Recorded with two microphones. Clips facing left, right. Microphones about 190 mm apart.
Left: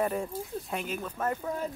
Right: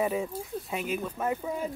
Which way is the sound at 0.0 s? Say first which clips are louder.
Right 1 dB; 5° right (ahead or behind).